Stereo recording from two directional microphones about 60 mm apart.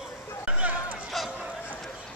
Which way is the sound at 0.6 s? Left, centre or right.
Right.